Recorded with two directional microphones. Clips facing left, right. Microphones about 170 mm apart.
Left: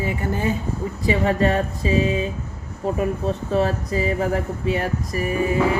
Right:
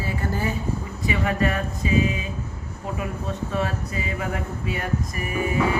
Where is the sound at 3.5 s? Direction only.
35° left (ahead or behind).